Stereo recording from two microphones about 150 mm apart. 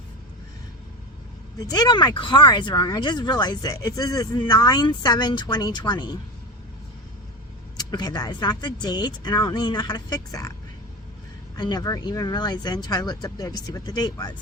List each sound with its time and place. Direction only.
1.5 s speech: 25° left (ahead or behind)
7.8 s speech: 25° left (ahead or behind)
11.5 s speech: 30° left (ahead or behind)